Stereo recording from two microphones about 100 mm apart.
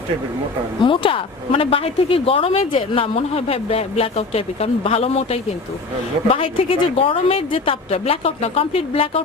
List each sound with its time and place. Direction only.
0.8 s a woman's voice: 60° left (ahead or behind); by 5.4 s 90° left
6.3 s a woman's voice: 65° left (ahead or behind)